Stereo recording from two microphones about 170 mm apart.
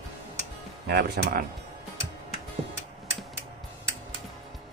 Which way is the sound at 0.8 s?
75° right (ahead or behind).